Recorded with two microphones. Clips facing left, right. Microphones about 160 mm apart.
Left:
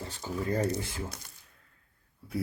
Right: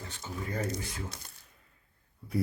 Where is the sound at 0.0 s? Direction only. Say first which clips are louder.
Left 5 dB; 35° left (ahead or behind).